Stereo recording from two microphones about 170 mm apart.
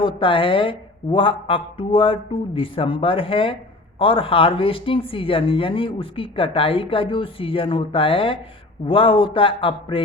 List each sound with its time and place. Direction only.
0.0 s a woman's voice: 30° left (ahead or behind)